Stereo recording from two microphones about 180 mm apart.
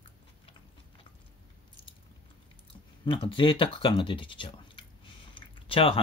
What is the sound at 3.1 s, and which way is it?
Speech, 30° left (ahead or behind).